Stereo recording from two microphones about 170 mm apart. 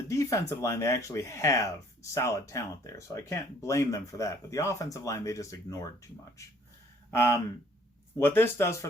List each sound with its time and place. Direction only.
0.1 s speech: 20° left (ahead or behind)